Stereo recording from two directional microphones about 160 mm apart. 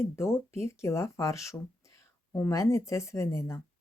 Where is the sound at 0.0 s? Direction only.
15° left (ahead or behind).